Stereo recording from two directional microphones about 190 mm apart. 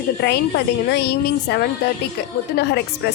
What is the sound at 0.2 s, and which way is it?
Speech, 60° left (ahead or behind).